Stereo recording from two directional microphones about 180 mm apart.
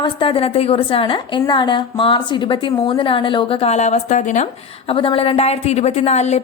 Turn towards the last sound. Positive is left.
turn(degrees=40)  # may be behind; listen again after turning